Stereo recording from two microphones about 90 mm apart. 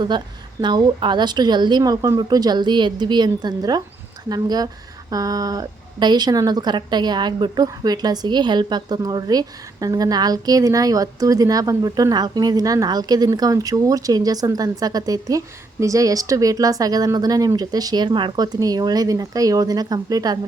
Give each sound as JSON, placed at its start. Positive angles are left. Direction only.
{"t": 0.6, "sound": "speech", "side_deg": -55}